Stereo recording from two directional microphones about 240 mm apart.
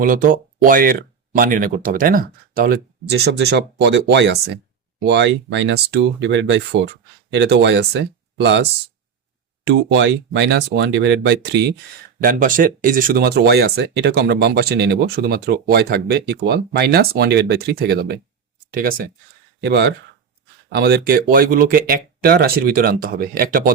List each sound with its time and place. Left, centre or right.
0.0 s speech: right
9.6 s speech: right
12.2 s speech: right